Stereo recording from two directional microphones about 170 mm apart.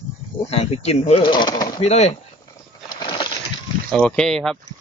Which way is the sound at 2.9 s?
25° left (ahead or behind).